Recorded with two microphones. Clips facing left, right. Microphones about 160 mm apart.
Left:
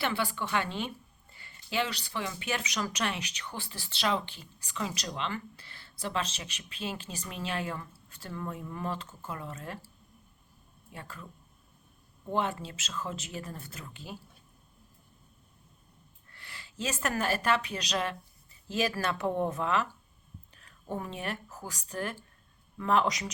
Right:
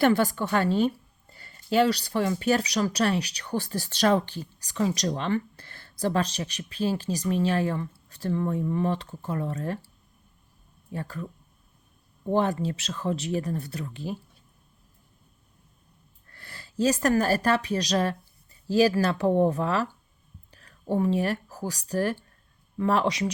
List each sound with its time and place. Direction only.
0.0 s a woman's voice: 40° right (ahead or behind)
10.9 s a woman's voice: 35° right (ahead or behind)
16.3 s a woman's voice: 40° right (ahead or behind)